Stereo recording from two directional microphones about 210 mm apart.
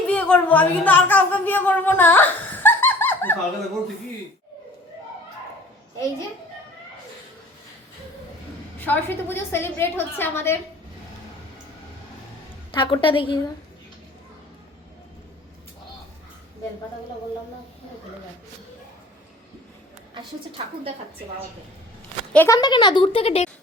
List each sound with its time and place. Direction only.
0.1 s a woman's voice: 5° left (ahead or behind)
8.8 s a woman's voice: 10° left (ahead or behind)
12.7 s speech: 25° left (ahead or behind)
22.3 s speech: 10° left (ahead or behind); by 23.5 s 30° left (ahead or behind)